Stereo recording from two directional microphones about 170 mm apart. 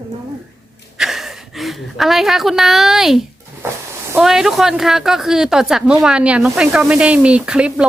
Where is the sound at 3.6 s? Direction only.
15° right (ahead or behind).